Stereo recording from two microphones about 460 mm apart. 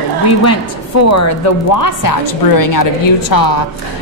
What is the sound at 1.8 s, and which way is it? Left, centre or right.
A woman's voice, left.